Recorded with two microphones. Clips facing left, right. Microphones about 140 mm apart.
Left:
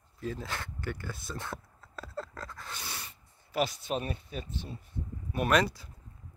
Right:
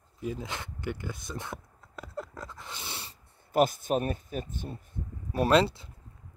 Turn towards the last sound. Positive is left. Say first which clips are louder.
# right 4 dB
turn(degrees=-25)  # may be behind; listen again after turning